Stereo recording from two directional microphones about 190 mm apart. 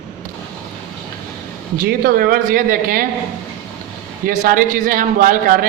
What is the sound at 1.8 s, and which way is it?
A man's voice, 50° right (ahead or behind).